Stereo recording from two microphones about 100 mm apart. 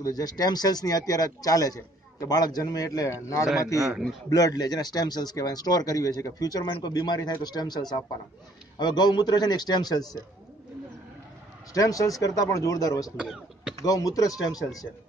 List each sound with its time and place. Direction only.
0.0 s a man's voice: 40° left (ahead or behind)
11.7 s a man's voice: 35° left (ahead or behind)
13.2 s speech: 5° right (ahead or behind)
13.7 s a man's voice: 35° left (ahead or behind)